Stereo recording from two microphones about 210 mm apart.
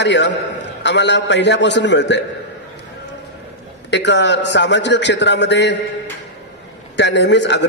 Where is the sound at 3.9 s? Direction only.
55° left (ahead or behind).